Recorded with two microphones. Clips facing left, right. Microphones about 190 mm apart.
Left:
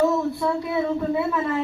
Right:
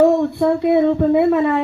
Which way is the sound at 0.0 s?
60° right (ahead or behind).